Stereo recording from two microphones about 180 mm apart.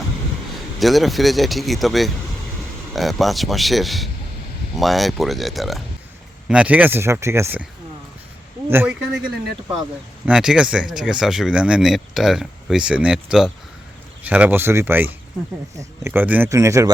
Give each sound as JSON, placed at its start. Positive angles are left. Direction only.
{"t": 0.8, "sound": "speech", "side_deg": 0}
{"t": 8.7, "sound": "speech", "side_deg": -10}
{"t": 10.2, "sound": "speech", "side_deg": -5}